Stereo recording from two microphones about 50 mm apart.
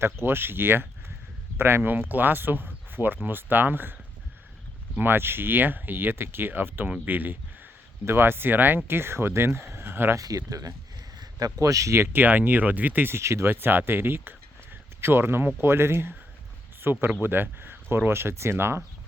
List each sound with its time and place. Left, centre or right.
0.0 s speech: right
4.9 s speech: right
8.0 s speech: right
9.7 s a sound: right
11.6 s speech: right
12.1 s speech: right
13.1 s speech: right
13.5 s speech: right
16.8 s speech: right